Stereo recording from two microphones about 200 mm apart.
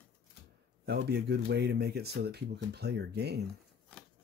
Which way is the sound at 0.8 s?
55° right (ahead or behind).